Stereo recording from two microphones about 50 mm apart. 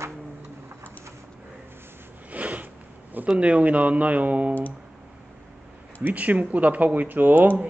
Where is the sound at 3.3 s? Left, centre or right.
Right.